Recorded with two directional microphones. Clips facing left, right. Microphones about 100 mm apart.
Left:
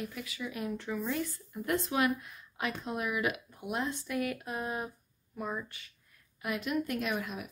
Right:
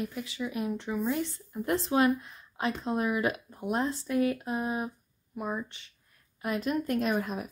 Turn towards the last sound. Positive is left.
turn(degrees=-40)  # may be behind; listen again after turning